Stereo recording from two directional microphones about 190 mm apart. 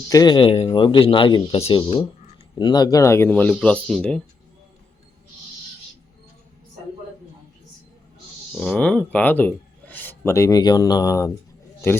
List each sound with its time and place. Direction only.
0.1 s speech: 20° left (ahead or behind); by 4.2 s 5° left (ahead or behind)
8.7 s speech: 5° left (ahead or behind)